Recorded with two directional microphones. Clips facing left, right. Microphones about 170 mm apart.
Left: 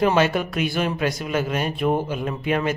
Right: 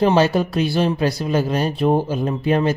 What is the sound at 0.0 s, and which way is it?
Speech, 30° right (ahead or behind).